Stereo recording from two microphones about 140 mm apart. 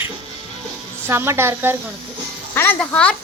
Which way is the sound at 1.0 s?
20° right (ahead or behind).